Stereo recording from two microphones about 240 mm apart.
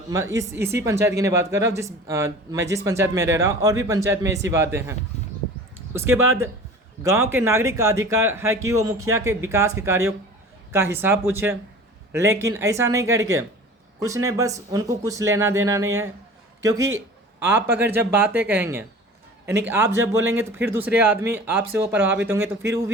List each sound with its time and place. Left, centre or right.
0.1 s a man's voice: centre